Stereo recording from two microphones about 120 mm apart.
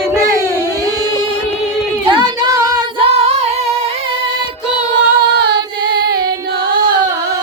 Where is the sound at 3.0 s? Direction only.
55° right (ahead or behind).